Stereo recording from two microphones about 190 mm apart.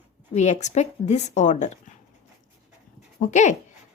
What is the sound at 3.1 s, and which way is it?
Speech, 40° left (ahead or behind).